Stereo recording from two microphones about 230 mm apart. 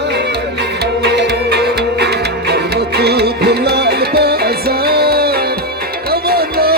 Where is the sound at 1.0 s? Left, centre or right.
Right.